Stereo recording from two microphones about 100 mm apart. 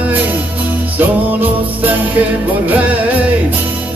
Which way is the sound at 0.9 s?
20° right (ahead or behind).